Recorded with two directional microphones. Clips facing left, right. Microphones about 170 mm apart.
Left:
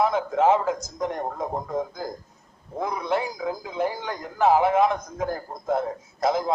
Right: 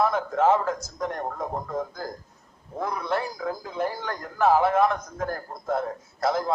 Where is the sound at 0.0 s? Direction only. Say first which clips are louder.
Left 1 dB; 15° left (ahead or behind).